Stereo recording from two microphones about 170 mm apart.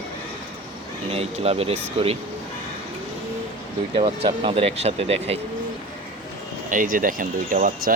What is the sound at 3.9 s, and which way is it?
Speech, 35° right (ahead or behind).